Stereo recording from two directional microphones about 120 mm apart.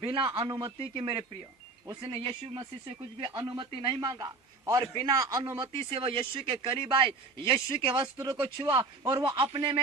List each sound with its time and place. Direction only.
0.0 s a man's voice: 45° right (ahead or behind)
8.0 s a man's voice: 30° right (ahead or behind)
8.4 s a man's voice: 45° right (ahead or behind)